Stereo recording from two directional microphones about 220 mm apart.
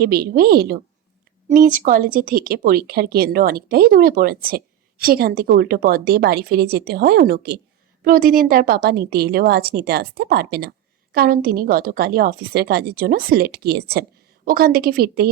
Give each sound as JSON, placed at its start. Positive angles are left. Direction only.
{"t": 0.0, "sound": "speech", "side_deg": -45}